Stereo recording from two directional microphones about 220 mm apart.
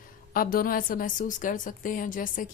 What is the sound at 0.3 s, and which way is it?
Speech, 40° left (ahead or behind).